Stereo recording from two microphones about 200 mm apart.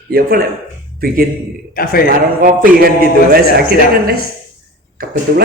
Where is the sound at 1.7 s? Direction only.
50° left (ahead or behind).